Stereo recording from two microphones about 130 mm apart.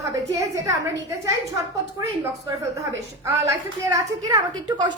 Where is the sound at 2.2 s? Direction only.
20° right (ahead or behind).